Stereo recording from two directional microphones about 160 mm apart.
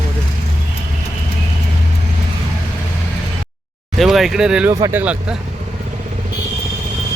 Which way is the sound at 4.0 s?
Centre (ahead or behind).